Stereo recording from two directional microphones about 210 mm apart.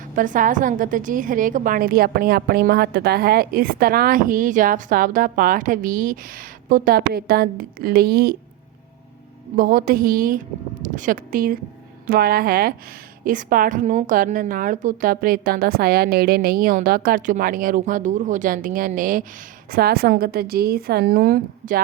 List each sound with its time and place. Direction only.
0.2 s a woman's voice: 40° right (ahead or behind)
9.6 s a woman's voice: 45° right (ahead or behind)